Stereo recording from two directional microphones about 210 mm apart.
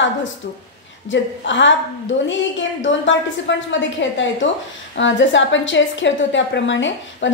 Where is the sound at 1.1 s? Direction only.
60° left (ahead or behind).